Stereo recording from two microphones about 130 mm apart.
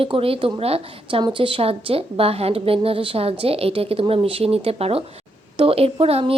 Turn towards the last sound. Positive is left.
turn(degrees=-50)  # may be behind; listen again after turning